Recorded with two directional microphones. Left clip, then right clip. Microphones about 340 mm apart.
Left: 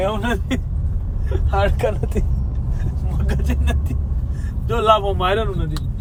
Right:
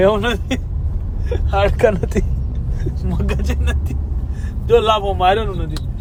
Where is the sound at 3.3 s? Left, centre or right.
Centre.